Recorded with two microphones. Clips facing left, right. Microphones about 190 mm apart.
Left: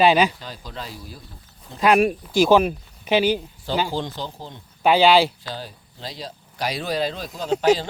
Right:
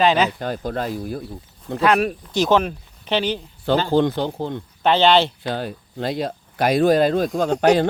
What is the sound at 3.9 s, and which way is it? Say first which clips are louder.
Speech: right 10 dB; 60° right (ahead or behind).